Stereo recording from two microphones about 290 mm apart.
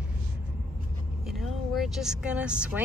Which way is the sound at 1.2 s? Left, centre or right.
Centre.